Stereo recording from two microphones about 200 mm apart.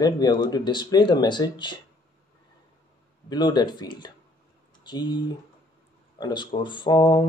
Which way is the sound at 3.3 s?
20° left (ahead or behind).